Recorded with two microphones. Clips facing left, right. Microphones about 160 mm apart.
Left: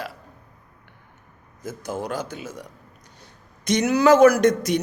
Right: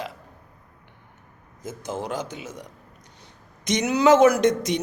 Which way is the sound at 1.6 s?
20° right (ahead or behind).